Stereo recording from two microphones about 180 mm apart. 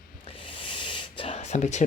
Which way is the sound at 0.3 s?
30° left (ahead or behind).